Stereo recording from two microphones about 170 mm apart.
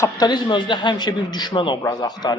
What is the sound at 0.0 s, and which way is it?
A man's voice, 25° left (ahead or behind).